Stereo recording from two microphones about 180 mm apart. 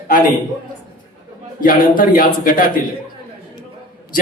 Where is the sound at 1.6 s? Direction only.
50° left (ahead or behind).